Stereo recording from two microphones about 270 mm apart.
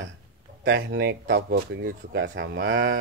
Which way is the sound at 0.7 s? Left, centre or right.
Right.